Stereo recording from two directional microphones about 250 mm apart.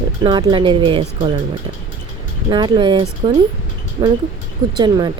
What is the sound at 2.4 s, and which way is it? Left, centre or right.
Speech, centre.